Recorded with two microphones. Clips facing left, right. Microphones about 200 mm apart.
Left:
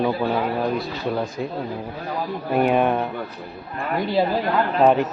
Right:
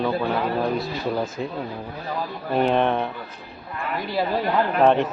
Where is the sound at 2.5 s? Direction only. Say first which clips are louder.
Left 1 dB; 10° left (ahead or behind).